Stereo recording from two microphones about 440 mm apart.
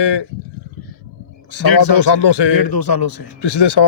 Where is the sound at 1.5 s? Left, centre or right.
Left.